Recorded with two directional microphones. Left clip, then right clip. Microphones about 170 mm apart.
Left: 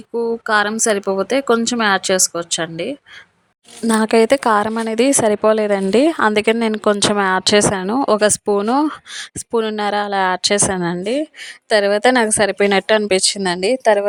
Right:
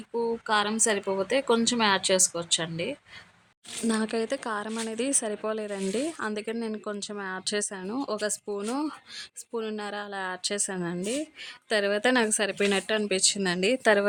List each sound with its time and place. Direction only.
0.2 s speech: 35° left (ahead or behind)
3.8 s a woman's voice: 55° left (ahead or behind); by 13.8 s 35° left (ahead or behind)
13.8 s a woman's voice: 20° left (ahead or behind)